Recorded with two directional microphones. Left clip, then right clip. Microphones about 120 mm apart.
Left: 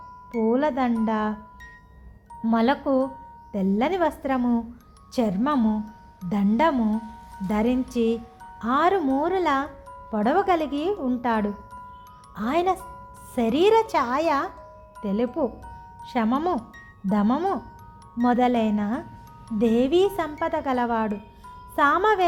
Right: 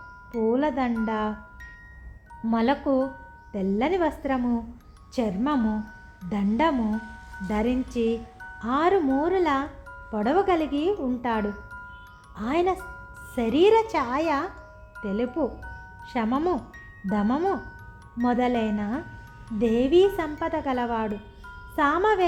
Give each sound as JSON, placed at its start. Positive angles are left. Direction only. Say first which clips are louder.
{"t": 0.4, "sound": "speech", "louder": "left 2 dB", "side_deg": 45}
{"t": 2.4, "sound": "speech", "louder": "left 2 dB", "side_deg": 45}